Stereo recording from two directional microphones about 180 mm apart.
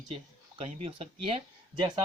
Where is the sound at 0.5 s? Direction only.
30° right (ahead or behind).